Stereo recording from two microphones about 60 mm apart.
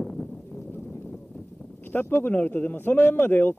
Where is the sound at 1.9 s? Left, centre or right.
Left.